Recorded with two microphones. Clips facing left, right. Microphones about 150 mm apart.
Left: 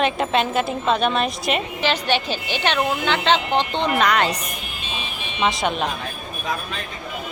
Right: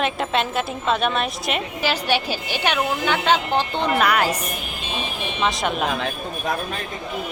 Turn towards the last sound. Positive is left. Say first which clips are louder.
# left 1 dB
turn(degrees=0)  # may be behind; listen again after turning